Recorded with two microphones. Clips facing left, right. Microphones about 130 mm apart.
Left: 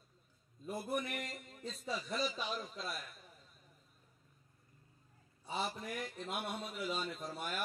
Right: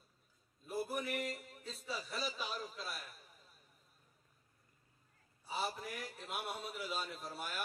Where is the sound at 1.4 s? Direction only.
5° right (ahead or behind).